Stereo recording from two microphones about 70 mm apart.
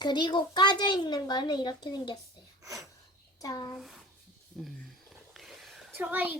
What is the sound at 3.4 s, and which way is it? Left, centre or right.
Speech, left.